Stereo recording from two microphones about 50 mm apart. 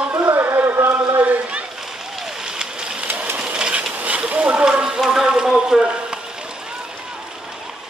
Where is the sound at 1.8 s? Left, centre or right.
Centre.